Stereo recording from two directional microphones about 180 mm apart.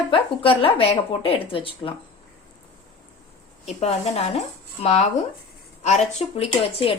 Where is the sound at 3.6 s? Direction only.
35° left (ahead or behind).